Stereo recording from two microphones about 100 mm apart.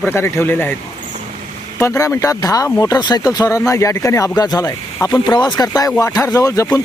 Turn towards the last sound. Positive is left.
turn(degrees=35)  # may be behind; listen again after turning